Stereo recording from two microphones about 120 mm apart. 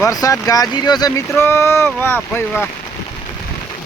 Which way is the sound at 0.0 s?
30° left (ahead or behind).